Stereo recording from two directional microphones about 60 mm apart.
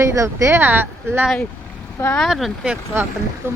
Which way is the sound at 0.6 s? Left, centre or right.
Right.